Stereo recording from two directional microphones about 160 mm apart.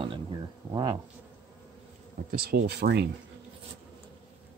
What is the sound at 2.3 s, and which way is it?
Speech, 75° right (ahead or behind).